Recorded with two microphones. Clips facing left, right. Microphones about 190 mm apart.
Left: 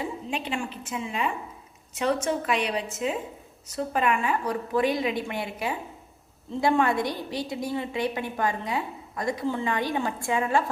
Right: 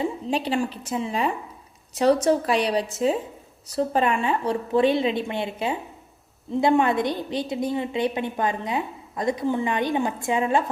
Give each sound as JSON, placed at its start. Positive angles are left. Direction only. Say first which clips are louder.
{"t": 0.0, "sound": "a woman's voice", "louder": "right 6 dB", "side_deg": -35}